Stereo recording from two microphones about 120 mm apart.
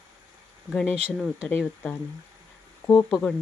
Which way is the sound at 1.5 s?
15° left (ahead or behind).